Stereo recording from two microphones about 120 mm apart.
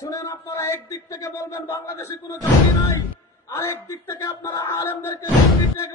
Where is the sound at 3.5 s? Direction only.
20° left (ahead or behind).